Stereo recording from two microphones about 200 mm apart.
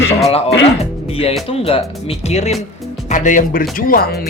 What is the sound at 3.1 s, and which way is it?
Speech, 40° left (ahead or behind).